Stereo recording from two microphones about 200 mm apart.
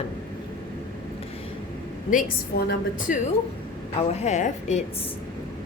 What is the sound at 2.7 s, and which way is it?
A woman's voice, 40° left (ahead or behind).